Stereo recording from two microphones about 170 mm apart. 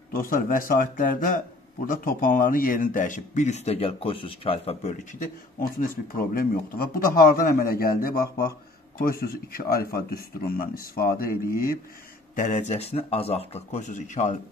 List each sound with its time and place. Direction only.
0.1 s speech: 55° left (ahead or behind); by 4.9 s 35° left (ahead or behind)
5.2 s speech: 55° left (ahead or behind)
12.4 s speech: 45° left (ahead or behind)